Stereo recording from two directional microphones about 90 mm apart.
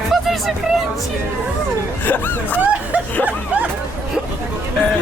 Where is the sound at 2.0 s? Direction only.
20° left (ahead or behind).